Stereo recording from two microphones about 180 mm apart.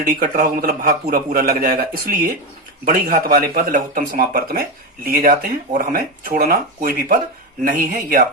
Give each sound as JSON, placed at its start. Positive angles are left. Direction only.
{"t": 0.0, "sound": "a man's voice", "side_deg": -55}